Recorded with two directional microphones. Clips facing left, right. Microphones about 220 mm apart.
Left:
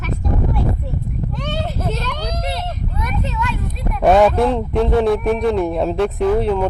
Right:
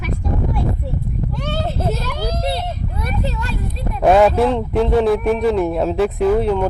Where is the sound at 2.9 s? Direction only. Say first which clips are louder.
Even; 35° right (ahead or behind).